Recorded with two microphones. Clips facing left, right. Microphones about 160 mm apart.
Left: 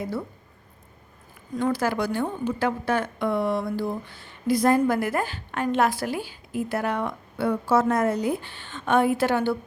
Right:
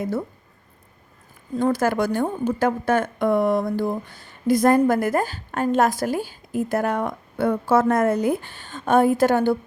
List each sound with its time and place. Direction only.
1.5 s a woman's voice: 45° right (ahead or behind)